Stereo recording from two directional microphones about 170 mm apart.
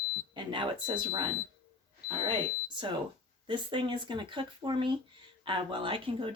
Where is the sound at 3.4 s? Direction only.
30° right (ahead or behind).